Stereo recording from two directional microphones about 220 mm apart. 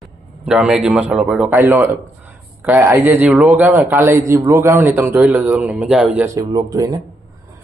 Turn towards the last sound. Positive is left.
turn(degrees=-15)  # may be behind; listen again after turning